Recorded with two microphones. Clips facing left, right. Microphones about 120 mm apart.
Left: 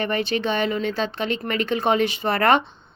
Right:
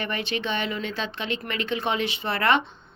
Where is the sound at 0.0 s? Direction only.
40° left (ahead or behind).